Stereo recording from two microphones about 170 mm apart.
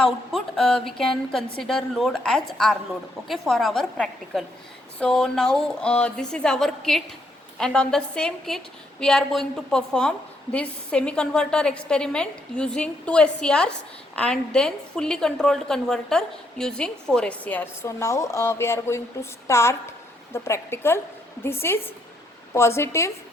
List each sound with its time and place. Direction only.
0.0 s a woman's voice: 5° left (ahead or behind)